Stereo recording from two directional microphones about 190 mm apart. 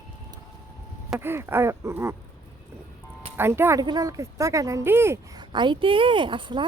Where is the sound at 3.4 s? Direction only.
10° right (ahead or behind).